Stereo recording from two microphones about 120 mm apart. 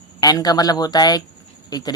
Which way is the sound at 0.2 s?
30° left (ahead or behind).